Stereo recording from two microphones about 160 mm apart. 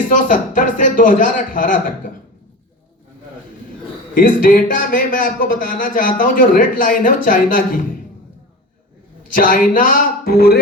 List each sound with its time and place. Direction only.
0.1 s a man's voice: 55° left (ahead or behind)
4.1 s a man's voice: 60° left (ahead or behind)
9.2 s a man's voice: 60° left (ahead or behind)